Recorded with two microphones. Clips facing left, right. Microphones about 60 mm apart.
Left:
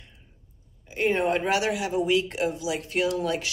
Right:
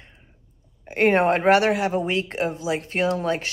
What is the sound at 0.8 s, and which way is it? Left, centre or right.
Speech, right.